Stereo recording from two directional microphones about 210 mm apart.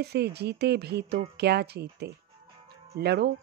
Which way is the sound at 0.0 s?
50° right (ahead or behind).